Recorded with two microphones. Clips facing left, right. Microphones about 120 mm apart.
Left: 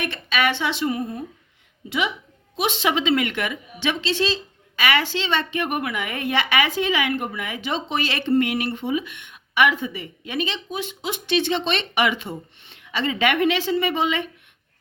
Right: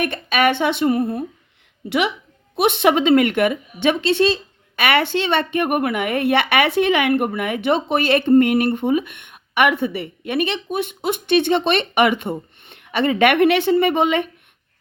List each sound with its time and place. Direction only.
0.0 s a woman's voice: 50° right (ahead or behind); by 2.1 s 70° right (ahead or behind)
2.6 s a woman's voice: 55° right (ahead or behind)